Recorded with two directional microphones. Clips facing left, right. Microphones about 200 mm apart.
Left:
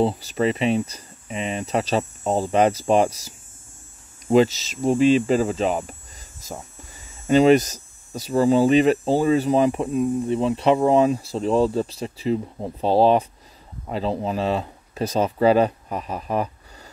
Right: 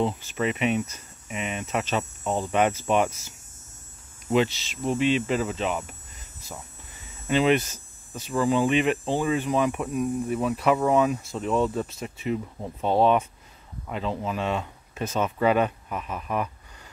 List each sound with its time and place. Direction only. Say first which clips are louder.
0.0 s speech: left 5 dB; 35° left (ahead or behind)
6.4 s a sound: left 6 dB; 40° left (ahead or behind)
7.2 s speech: left 7 dB; 40° left (ahead or behind)